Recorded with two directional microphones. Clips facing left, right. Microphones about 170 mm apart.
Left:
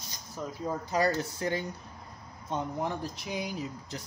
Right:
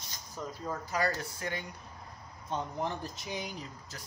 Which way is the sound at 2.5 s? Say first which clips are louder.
Left 2 dB; 5° left (ahead or behind).